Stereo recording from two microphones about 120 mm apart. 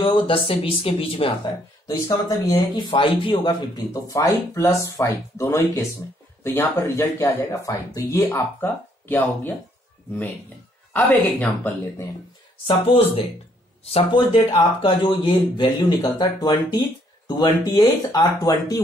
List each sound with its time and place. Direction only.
0.0 s speech: 45° left (ahead or behind); by 2.8 s 30° left (ahead or behind)
2.9 s speech: 45° left (ahead or behind)
8.3 s speech: 15° left (ahead or behind)
11.0 s speech: 15° left (ahead or behind)
12.6 s speech: 50° left (ahead or behind); by 18.8 s 30° left (ahead or behind)